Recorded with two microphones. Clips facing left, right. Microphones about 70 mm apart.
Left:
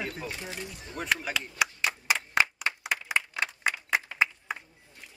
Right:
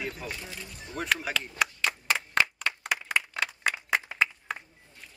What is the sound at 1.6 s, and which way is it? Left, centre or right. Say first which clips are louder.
Clapping: even; centre.